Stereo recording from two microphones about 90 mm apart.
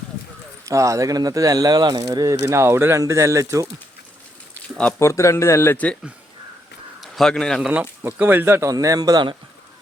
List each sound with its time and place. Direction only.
0.6 s speech: 35° right (ahead or behind)
2.4 s speech: 30° right (ahead or behind)
4.9 s speech: 35° left (ahead or behind)
5.7 s speech: 15° left (ahead or behind)
7.0 s speech: 5° left (ahead or behind)
8.0 s speech: 25° right (ahead or behind)
8.7 s a man's voice: 40° right (ahead or behind)